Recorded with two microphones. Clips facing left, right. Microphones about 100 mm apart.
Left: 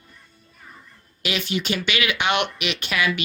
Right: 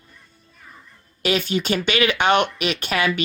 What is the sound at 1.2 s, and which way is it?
Speech, 40° right (ahead or behind).